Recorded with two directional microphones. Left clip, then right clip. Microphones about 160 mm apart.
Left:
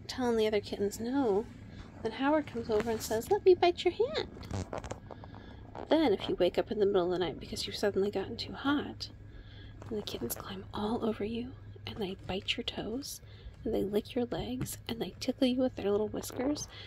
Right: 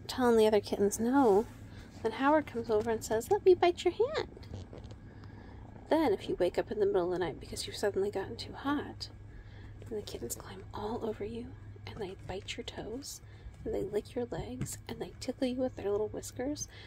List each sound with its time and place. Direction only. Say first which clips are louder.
0.0 s a woman's voice: right 4 dB; 20° right (ahead or behind)
2.0 s speech: right 2 dB; centre (ahead or behind)
5.9 s speech: left 1 dB; 10° left (ahead or behind)
10.0 s speech: left 3 dB; 30° left (ahead or behind)